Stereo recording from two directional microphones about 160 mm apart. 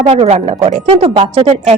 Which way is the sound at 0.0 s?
40° right (ahead or behind).